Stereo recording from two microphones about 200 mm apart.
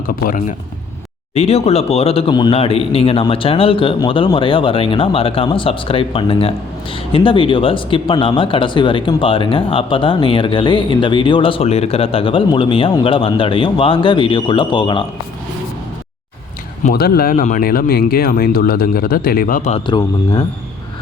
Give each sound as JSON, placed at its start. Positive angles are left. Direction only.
{"t": 0.1, "sound": "speech", "side_deg": 45}
{"t": 1.3, "sound": "speech", "side_deg": 30}
{"t": 16.8, "sound": "speech", "side_deg": 50}
{"t": 19.9, "sound": "speech", "side_deg": 20}